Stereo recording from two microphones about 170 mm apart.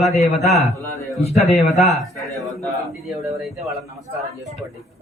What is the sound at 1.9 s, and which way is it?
Mantra, centre (ahead or behind).